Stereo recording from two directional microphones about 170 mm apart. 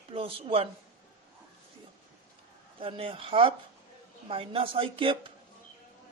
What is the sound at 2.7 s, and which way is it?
Speech, 30° right (ahead or behind).